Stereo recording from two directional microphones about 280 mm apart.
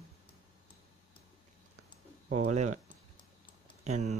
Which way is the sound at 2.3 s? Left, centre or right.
Right.